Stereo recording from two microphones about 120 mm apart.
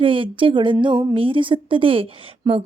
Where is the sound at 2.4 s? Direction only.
30° right (ahead or behind).